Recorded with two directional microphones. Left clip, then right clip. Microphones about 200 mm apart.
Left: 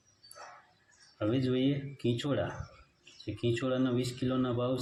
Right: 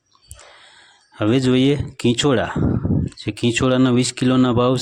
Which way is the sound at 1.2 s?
50° right (ahead or behind).